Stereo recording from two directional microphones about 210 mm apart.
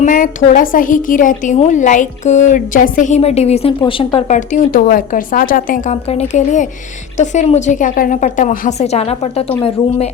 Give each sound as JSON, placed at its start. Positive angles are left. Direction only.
{"t": 0.0, "sound": "a woman's voice", "side_deg": 40}
{"t": 4.4, "sound": "a woman's voice", "side_deg": 40}